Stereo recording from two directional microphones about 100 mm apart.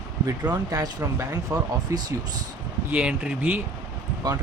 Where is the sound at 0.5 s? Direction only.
35° right (ahead or behind).